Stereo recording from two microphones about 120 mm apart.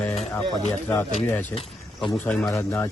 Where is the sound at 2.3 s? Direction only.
10° left (ahead or behind).